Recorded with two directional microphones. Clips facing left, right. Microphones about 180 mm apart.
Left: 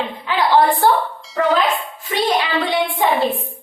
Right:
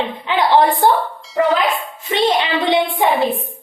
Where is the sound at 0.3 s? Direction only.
20° right (ahead or behind).